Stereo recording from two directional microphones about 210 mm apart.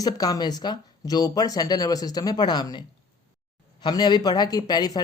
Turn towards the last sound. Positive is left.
turn(degrees=20)  # may be behind; listen again after turning